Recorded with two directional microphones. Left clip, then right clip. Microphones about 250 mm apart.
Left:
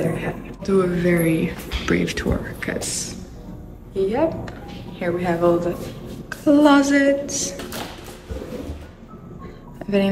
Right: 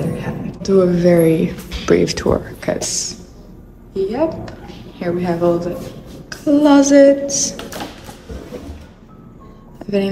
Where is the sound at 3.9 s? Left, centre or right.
Centre.